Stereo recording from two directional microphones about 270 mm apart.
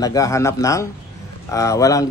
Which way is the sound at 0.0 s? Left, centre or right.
Centre.